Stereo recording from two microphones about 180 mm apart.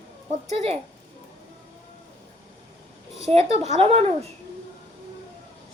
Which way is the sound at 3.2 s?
35° right (ahead or behind).